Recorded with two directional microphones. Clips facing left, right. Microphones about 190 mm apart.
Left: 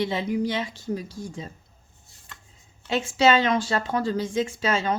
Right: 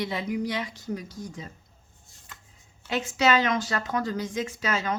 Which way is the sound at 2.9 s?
30° left (ahead or behind).